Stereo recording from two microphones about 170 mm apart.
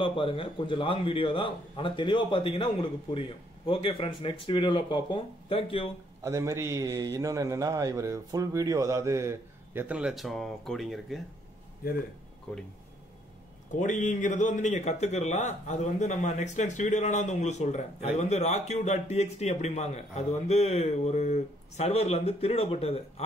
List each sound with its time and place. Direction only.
0.0 s a man's voice: 30° left (ahead or behind)
6.2 s a man's voice: 15° right (ahead or behind); by 11.1 s centre (ahead or behind)
13.7 s a man's voice: 45° left (ahead or behind)